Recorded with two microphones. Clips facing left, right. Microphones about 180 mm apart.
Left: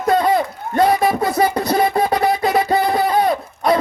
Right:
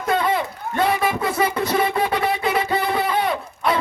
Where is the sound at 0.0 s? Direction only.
40° left (ahead or behind).